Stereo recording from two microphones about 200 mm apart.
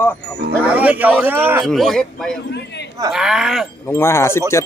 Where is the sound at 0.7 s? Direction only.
5° right (ahead or behind).